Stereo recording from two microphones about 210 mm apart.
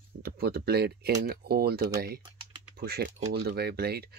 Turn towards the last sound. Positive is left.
turn(degrees=-50)  # may be behind; listen again after turning